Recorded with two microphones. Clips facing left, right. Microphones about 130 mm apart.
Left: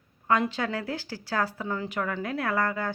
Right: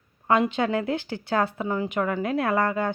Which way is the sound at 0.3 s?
20° right (ahead or behind).